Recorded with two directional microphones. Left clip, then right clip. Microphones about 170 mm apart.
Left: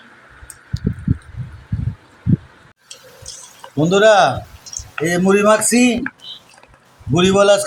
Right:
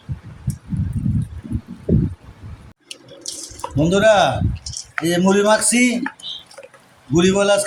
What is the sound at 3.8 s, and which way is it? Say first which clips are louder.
A man's voice: left 3 dB; 30° left (ahead or behind).